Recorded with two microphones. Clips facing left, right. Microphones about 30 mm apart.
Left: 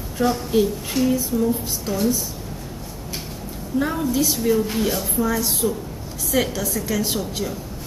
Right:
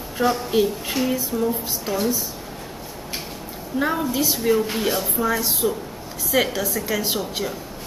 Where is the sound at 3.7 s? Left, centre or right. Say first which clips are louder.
Left 1 dB; centre.